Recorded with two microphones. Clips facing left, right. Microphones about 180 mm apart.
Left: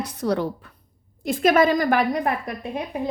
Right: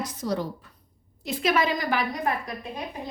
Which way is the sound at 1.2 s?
50° left (ahead or behind).